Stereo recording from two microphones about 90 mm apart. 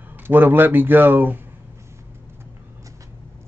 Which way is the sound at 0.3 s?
20° right (ahead or behind).